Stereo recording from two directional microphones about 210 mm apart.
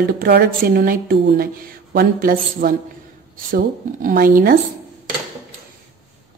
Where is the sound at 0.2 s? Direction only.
45° right (ahead or behind).